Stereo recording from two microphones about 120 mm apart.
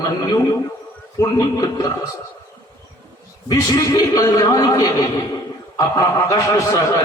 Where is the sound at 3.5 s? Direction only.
30° left (ahead or behind).